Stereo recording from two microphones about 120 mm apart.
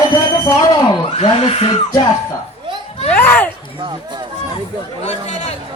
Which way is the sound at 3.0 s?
15° left (ahead or behind).